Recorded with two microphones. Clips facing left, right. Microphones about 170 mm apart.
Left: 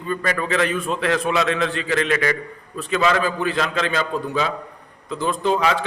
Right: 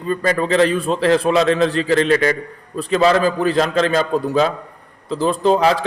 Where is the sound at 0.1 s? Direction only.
30° right (ahead or behind).